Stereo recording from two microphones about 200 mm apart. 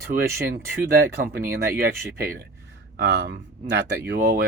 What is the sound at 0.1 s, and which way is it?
Speech, 45° right (ahead or behind).